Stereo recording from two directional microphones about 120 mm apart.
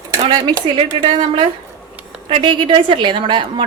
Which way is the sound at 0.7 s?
45° right (ahead or behind).